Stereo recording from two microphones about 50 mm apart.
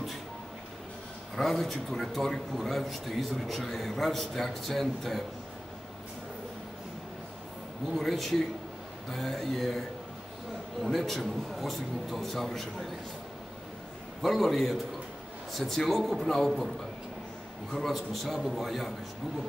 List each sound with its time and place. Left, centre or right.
1.3 s a man's voice: centre
7.9 s a man's voice: centre
14.2 s a man's voice: centre
17.7 s a man's voice: centre